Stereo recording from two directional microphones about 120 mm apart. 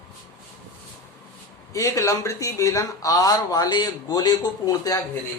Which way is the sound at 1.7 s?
25° left (ahead or behind).